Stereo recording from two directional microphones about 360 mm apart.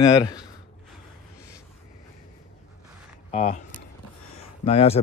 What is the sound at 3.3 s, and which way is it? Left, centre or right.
Speech, centre.